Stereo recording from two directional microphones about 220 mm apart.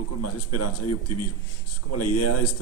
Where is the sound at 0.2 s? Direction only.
90° left.